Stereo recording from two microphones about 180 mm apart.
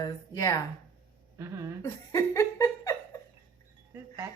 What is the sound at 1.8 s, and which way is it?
Laughter, 15° left (ahead or behind).